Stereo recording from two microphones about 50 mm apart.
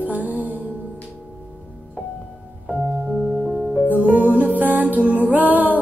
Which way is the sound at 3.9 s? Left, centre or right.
Right.